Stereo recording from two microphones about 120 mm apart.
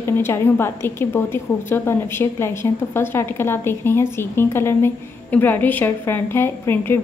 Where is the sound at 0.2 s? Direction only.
20° left (ahead or behind).